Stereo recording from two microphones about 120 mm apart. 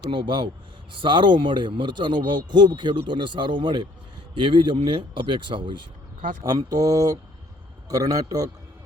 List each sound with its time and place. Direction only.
0.1 s speech: 40° right (ahead or behind)
6.4 s speech: 30° right (ahead or behind)